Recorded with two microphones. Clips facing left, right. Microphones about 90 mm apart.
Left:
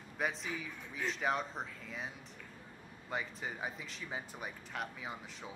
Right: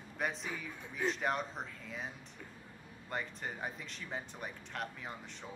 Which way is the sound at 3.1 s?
Centre (ahead or behind).